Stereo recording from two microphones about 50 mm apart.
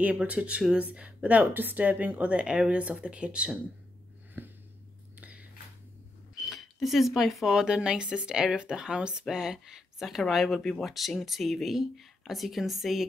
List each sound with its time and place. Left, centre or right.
0.1 s speech: right
0.7 s speech: right
4.4 s a sound: right
6.3 s speech: centre